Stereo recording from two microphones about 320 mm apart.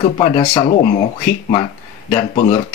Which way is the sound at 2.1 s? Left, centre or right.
Centre.